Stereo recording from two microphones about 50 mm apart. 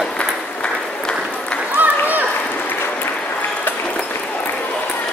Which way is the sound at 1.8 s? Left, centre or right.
Right.